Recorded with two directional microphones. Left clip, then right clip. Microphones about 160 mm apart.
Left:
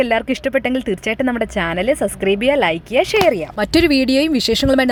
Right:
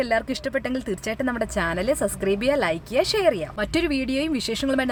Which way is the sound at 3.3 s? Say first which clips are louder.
Left 8 dB; 35° left (ahead or behind).